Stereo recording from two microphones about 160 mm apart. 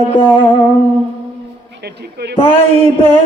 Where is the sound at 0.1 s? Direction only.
30° left (ahead or behind).